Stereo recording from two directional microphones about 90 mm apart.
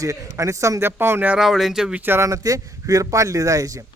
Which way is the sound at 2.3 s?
40° right (ahead or behind).